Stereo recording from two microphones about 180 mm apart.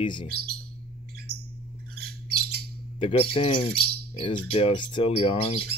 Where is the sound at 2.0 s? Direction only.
60° right (ahead or behind).